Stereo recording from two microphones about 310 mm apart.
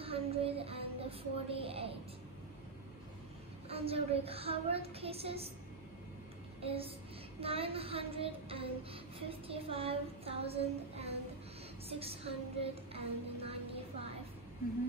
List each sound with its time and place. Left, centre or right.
0.0 s speech: centre
3.6 s a woman's voice: centre
6.6 s child singing: centre
11.9 s a woman's voice: centre
12.9 s child singing: centre